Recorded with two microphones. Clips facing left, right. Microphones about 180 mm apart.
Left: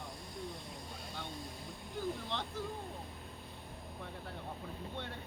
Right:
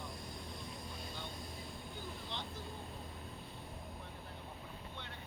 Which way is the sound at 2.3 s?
75° left (ahead or behind).